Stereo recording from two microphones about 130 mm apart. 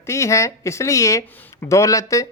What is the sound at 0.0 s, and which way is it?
Speech, 20° left (ahead or behind).